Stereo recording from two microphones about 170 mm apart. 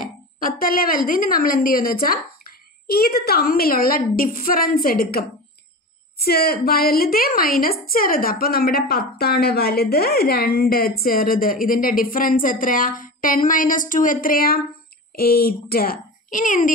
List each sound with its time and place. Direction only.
0.0 s a woman's voice: 55° left (ahead or behind)